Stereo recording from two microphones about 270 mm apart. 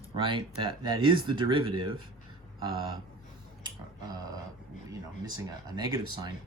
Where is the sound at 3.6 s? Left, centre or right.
Centre.